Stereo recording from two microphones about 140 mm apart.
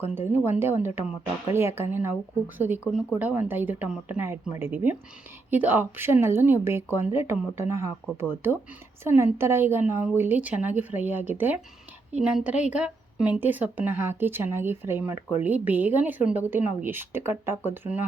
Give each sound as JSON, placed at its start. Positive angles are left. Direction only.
{"t": 0.1, "sound": "a woman's voice", "side_deg": -15}